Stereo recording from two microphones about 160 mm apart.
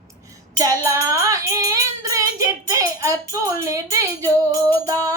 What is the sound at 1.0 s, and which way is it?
Child singing, 20° right (ahead or behind).